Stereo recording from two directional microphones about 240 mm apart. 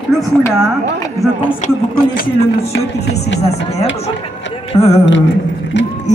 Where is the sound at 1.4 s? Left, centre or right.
Left.